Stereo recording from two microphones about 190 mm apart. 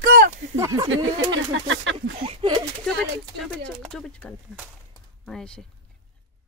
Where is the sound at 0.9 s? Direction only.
85° right.